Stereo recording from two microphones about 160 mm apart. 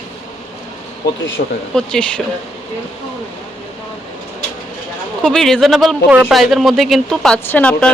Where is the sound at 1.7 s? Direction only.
5° left (ahead or behind).